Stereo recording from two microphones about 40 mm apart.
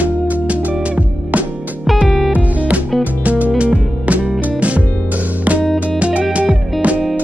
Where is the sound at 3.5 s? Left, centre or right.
Right.